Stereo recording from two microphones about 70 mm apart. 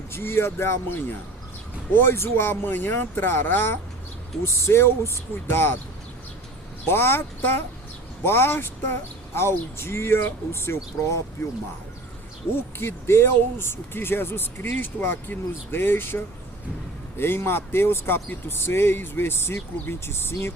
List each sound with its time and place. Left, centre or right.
0.1 s speech: left
6.9 s speech: left
12.8 s speech: left